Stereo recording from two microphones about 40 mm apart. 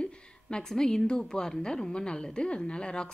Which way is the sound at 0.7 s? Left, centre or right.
Centre.